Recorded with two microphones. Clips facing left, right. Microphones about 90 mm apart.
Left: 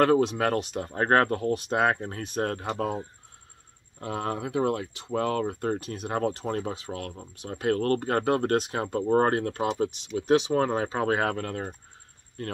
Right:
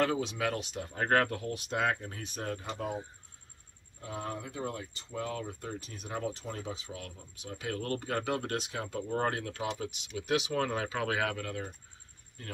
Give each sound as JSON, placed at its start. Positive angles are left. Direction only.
{"t": 0.0, "sound": "speech", "side_deg": 55}
{"t": 4.0, "sound": "speech", "side_deg": 70}
{"t": 10.0, "sound": "speech", "side_deg": 35}
{"t": 12.4, "sound": "speech", "side_deg": 60}